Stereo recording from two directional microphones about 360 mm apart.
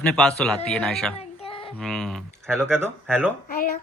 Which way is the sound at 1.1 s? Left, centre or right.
Centre.